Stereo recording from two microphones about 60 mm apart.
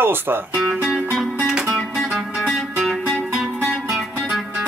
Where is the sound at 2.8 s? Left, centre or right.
Centre.